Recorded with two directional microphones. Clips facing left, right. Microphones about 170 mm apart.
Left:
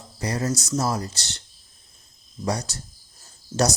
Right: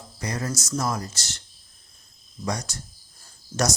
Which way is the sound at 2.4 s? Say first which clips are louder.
Left 3 dB; 30° left (ahead or behind).